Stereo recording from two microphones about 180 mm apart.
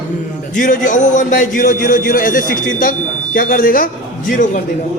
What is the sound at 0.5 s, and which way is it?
A man's voice, 45° left (ahead or behind).